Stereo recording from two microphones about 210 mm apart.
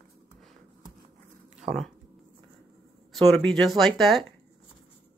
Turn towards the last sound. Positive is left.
turn(degrees=0)  # may be behind; listen again after turning